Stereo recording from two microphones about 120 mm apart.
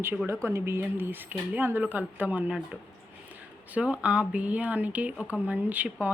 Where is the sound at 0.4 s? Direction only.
20° right (ahead or behind).